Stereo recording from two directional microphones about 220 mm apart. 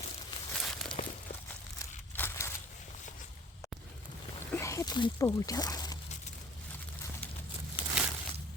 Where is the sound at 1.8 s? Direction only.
10° left (ahead or behind).